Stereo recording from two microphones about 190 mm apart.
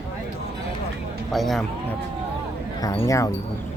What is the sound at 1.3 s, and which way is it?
Speech, centre (ahead or behind).